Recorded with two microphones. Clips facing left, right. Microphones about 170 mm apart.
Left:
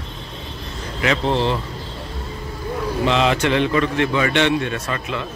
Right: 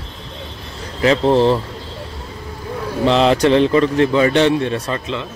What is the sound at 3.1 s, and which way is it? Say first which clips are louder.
A man's voice: right 6 dB; 35° right (ahead or behind).